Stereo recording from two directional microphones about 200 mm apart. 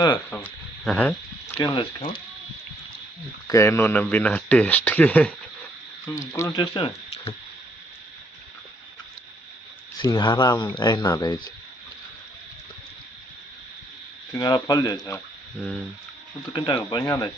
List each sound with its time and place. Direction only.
0.3 s speech: 10° left (ahead or behind)
3.4 s speech: 15° left (ahead or behind)
10.0 s speech: 20° left (ahead or behind)
14.3 s speech: 20° left (ahead or behind)
16.5 s speech: 20° left (ahead or behind)